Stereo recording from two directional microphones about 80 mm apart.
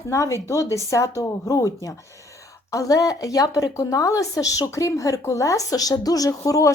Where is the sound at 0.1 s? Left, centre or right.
Left.